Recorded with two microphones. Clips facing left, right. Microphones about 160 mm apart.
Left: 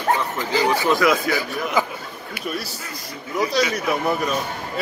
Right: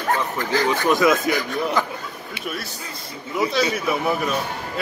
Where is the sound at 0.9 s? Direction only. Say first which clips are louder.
Right 4 dB; 20° right (ahead or behind).